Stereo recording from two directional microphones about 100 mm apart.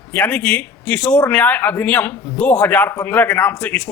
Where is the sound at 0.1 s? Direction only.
15° left (ahead or behind).